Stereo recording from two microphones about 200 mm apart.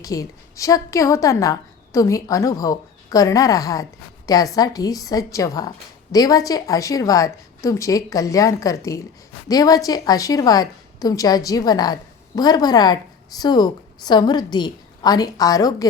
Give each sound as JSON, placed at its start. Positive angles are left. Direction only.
{"t": 0.0, "sound": "a woman's voice", "side_deg": 15}